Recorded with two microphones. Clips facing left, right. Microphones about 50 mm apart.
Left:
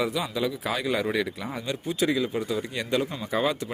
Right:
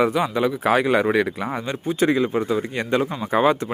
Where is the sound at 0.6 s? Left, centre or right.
Right.